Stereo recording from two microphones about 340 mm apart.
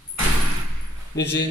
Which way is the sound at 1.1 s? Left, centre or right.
Left.